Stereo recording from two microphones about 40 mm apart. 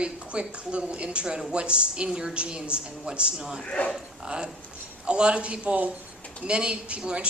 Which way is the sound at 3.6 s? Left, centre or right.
Left.